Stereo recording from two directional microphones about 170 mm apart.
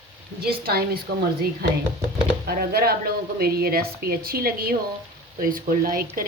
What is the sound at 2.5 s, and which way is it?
Speech, 65° right (ahead or behind).